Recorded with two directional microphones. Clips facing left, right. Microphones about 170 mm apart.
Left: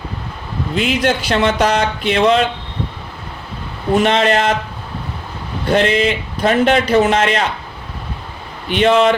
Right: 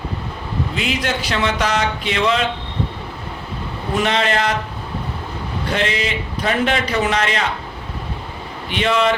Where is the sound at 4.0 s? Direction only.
45° left (ahead or behind).